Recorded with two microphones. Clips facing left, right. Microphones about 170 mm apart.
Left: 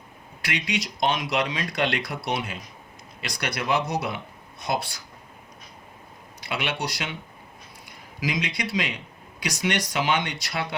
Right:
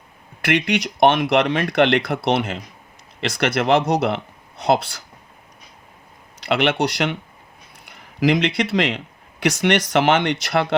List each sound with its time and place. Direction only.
0.4 s speech: 65° right (ahead or behind)
6.4 s speech: 70° right (ahead or behind)